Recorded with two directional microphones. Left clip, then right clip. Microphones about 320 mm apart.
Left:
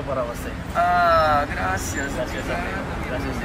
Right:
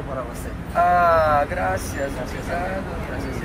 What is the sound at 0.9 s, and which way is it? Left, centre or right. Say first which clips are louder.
Speech: even; centre.